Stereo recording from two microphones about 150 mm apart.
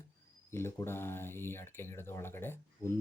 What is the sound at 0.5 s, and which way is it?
Speech, 15° left (ahead or behind).